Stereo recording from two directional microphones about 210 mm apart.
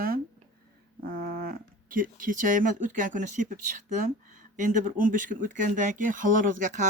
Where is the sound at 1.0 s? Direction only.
45° right (ahead or behind).